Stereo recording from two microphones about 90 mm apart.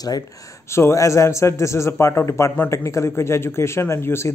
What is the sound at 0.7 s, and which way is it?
A man's voice, 30° left (ahead or behind).